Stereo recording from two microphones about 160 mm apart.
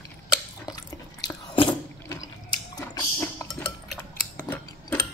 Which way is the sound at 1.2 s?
30° left (ahead or behind).